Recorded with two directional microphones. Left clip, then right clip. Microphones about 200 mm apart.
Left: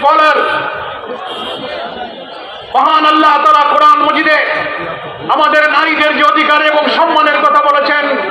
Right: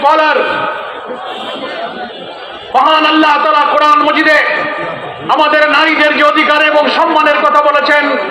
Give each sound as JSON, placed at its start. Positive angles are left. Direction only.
{"t": 0.0, "sound": "a man's voice", "side_deg": -35}
{"t": 2.7, "sound": "a man's voice", "side_deg": -35}